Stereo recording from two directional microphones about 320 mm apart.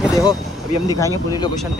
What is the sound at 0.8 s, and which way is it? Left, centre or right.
Speech, centre.